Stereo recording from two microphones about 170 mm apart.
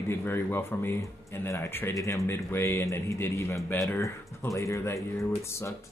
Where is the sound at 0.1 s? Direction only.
15° left (ahead or behind).